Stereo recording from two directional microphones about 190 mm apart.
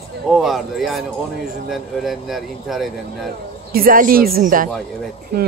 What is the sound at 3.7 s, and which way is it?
Speech, 50° right (ahead or behind).